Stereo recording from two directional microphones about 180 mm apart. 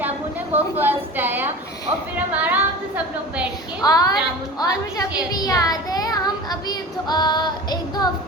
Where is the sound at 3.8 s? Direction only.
20° left (ahead or behind).